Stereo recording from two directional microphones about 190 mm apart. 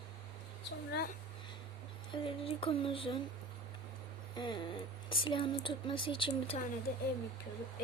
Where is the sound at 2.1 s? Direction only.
30° left (ahead or behind).